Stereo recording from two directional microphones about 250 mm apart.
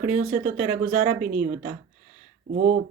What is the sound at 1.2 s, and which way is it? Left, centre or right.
Speech, centre.